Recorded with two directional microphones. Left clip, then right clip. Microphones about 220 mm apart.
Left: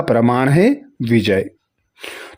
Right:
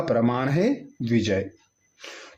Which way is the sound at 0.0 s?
40° left (ahead or behind).